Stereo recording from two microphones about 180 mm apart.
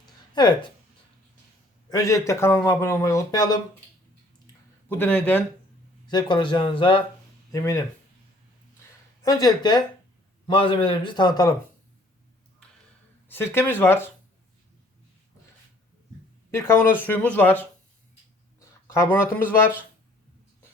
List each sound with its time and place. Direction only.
0.0 s a sound: 25° left (ahead or behind)
1.9 s a man's voice: 20° left (ahead or behind)
4.9 s a man's voice: 10° left (ahead or behind)
6.1 s a man's voice: 25° left (ahead or behind)
7.5 s a man's voice: 15° left (ahead or behind)
9.2 s a man's voice: 20° left (ahead or behind)
13.2 s a man's voice: 10° left (ahead or behind)
16.5 s a man's voice: 15° left (ahead or behind)
18.9 s a man's voice: 10° left (ahead or behind)